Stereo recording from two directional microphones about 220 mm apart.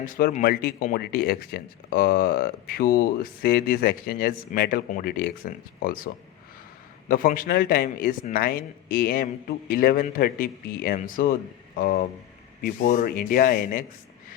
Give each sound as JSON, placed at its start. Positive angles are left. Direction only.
{"t": 0.0, "sound": "speech", "side_deg": 40}
{"t": 7.1, "sound": "a man's voice", "side_deg": 40}